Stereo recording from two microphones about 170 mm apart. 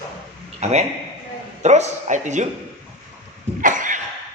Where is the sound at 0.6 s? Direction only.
40° right (ahead or behind).